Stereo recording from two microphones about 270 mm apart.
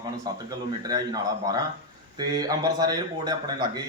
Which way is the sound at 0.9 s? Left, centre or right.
Centre.